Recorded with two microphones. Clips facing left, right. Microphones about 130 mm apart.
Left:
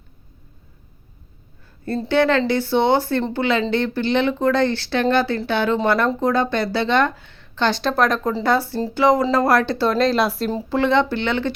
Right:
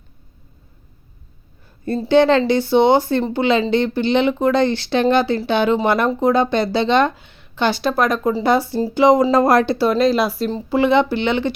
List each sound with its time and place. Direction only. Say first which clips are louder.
2.0 s a woman's voice: right 4 dB; 20° right (ahead or behind)
9.7 s speech: right 2 dB; 5° right (ahead or behind)